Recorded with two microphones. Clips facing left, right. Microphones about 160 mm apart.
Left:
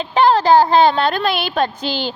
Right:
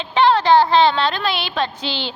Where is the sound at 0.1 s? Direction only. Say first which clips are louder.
Left 1 dB; 40° left (ahead or behind).